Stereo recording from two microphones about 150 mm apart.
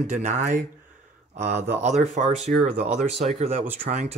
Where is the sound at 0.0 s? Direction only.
55° right (ahead or behind).